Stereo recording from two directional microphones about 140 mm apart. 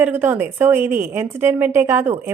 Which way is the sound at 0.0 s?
15° right (ahead or behind).